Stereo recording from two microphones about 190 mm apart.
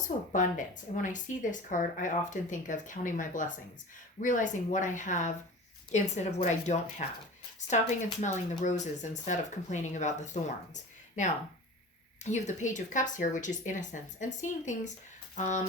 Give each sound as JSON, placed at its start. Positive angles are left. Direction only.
{"t": 0.3, "sound": "speech", "side_deg": 40}
{"t": 12.2, "sound": "speech", "side_deg": 40}